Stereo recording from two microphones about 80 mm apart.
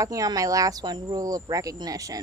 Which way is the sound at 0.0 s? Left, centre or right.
Right.